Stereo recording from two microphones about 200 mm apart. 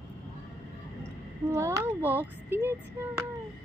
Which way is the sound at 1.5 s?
15° right (ahead or behind).